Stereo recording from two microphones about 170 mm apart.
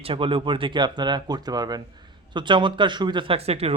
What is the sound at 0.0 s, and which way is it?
Speech, 30° right (ahead or behind).